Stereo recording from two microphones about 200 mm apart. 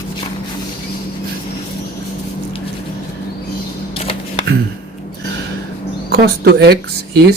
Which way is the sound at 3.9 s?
30° left (ahead or behind).